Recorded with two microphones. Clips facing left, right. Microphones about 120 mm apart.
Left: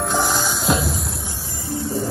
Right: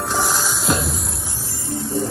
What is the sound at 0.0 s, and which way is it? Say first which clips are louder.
Music: left 1 dB; centre (ahead or behind).